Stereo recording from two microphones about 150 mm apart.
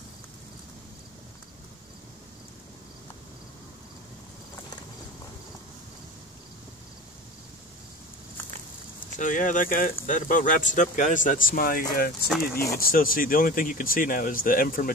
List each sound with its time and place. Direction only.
9.2 s speech: 60° left (ahead or behind)
11.9 s speech: 85° left
12.7 s speech: 70° left (ahead or behind)